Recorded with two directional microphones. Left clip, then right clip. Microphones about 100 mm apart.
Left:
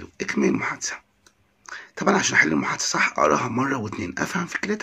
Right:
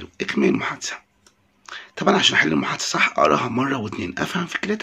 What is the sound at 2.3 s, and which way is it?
Speech, 15° right (ahead or behind).